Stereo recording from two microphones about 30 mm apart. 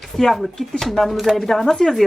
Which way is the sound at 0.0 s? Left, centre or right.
Centre.